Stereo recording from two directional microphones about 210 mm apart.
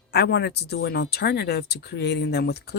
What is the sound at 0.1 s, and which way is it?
Speech, 55° left (ahead or behind).